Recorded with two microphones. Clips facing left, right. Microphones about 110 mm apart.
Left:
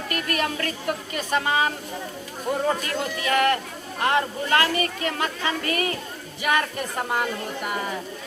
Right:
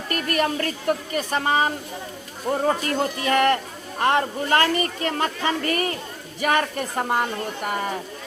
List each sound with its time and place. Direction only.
0.1 s speech: 40° right (ahead or behind)
2.8 s speech: 35° right (ahead or behind)